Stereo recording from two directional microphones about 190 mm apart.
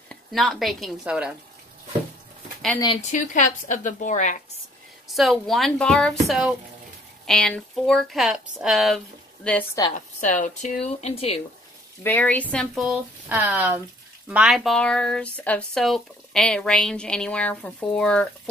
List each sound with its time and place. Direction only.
0.1 s speech: centre (ahead or behind)
3.1 s speech: 40° left (ahead or behind)
5.1 s speech: centre (ahead or behind)
9.9 s speech: 40° left (ahead or behind)
12.0 s speech: 10° left (ahead or behind)
13.3 s speech: 10° right (ahead or behind)